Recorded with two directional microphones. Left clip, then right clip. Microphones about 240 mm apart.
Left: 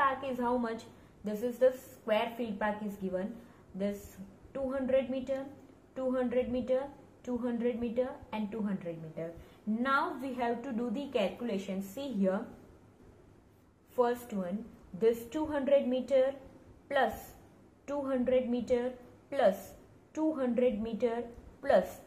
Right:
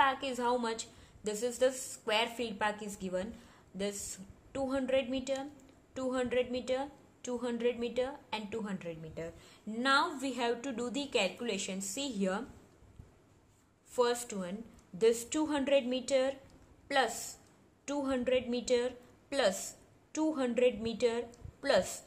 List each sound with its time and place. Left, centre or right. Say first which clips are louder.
0.0 s a woman's voice: right 1 dB; right
4.5 s a woman's voice: left 1 dB; right
13.9 s a woman's voice: left 1 dB; right